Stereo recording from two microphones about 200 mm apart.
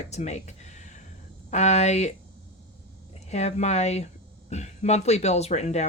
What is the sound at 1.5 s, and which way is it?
Speech, 35° left (ahead or behind).